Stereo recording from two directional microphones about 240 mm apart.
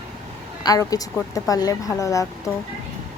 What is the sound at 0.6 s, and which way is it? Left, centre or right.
A woman's voice, centre.